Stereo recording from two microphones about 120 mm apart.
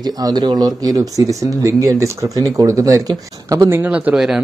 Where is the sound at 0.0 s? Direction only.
35° right (ahead or behind).